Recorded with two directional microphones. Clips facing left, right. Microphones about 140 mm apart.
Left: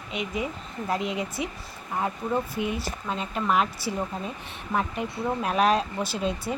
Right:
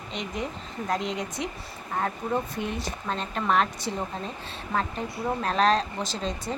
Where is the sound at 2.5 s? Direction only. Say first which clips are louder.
Left 2 dB; 5° left (ahead or behind).